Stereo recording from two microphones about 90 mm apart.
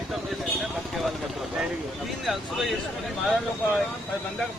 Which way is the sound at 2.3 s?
Centre (ahead or behind).